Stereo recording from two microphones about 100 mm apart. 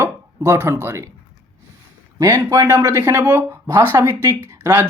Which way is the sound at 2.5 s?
30° right (ahead or behind).